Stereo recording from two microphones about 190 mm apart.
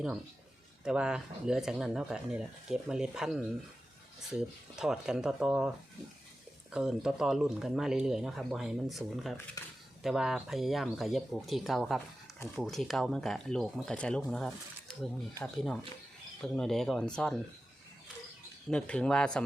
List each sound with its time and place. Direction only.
0.9 s speech: 5° right (ahead or behind)
9.6 s speech: 20° left (ahead or behind)
10.0 s speech: centre (ahead or behind)
18.7 s speech: 5° left (ahead or behind)